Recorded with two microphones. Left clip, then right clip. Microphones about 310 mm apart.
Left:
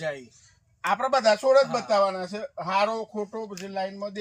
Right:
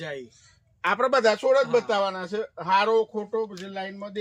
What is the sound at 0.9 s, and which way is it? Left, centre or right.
A man's voice, centre.